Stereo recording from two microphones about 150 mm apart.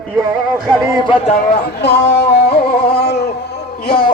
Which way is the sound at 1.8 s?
90° left.